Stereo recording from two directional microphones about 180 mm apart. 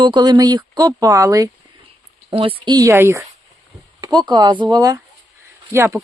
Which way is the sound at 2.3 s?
30° right (ahead or behind).